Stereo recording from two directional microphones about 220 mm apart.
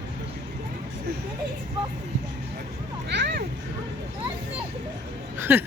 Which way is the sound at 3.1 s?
50° right (ahead or behind).